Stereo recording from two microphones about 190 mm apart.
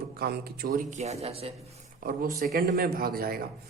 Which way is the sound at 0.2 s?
55° right (ahead or behind).